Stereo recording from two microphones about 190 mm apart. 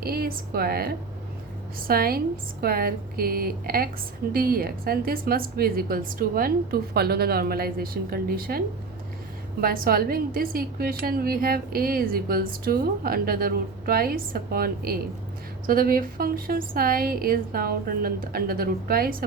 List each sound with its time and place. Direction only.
0.0 s a woman's voice: 55° right (ahead or behind)